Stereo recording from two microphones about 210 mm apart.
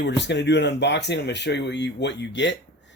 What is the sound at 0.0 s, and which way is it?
Speech, 55° left (ahead or behind).